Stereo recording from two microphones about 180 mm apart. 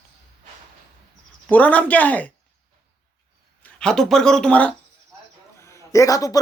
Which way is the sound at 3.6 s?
5° left (ahead or behind).